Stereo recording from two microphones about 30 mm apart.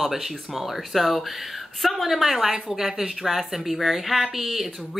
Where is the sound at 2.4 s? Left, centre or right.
Centre.